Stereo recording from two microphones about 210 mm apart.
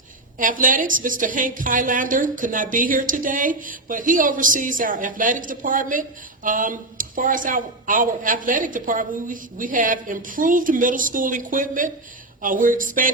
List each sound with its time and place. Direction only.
0.3 s a woman's voice: 40° right (ahead or behind)